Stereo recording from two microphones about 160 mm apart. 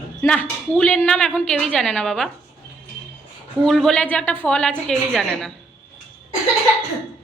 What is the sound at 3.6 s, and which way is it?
A woman's voice, centre (ahead or behind).